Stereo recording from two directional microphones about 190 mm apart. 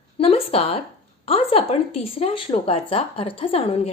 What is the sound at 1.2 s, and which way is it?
Speech, 30° left (ahead or behind).